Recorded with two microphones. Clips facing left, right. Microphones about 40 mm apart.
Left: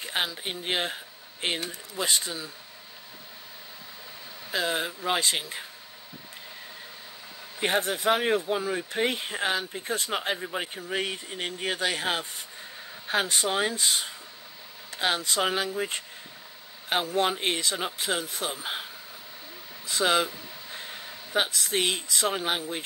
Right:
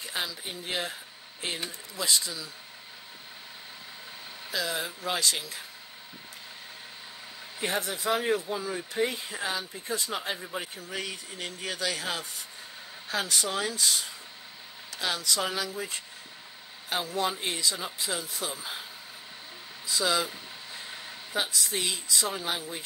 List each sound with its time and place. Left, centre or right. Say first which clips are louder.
0.0 s speech: left 4 dB; left
4.5 s speech: left 4 dB; left
7.6 s speech: left 5 dB; left
19.9 s speech: left 3 dB; left
21.3 s speech: left 4 dB; left